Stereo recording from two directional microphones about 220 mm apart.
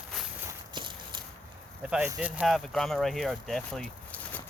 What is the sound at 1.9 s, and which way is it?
Speech, 5° right (ahead or behind).